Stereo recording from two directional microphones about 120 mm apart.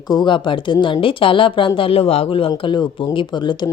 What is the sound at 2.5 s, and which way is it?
Speech, 40° left (ahead or behind).